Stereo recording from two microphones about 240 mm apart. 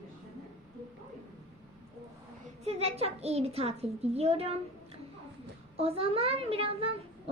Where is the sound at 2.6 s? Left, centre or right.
Right.